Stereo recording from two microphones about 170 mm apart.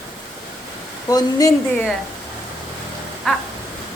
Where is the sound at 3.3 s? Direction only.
Centre (ahead or behind).